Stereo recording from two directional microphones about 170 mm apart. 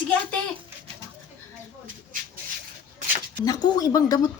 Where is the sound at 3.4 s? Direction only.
25° left (ahead or behind).